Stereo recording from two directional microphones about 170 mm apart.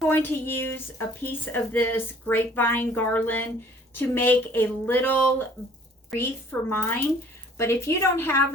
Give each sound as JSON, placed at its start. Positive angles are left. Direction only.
{"t": 0.1, "sound": "speech", "side_deg": 10}